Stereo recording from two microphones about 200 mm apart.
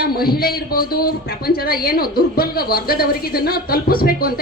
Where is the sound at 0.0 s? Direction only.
50° left (ahead or behind).